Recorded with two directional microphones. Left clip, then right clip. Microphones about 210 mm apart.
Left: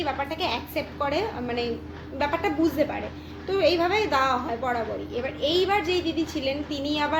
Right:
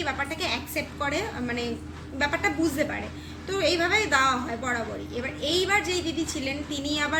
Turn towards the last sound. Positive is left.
turn(degrees=-20)  # may be behind; listen again after turning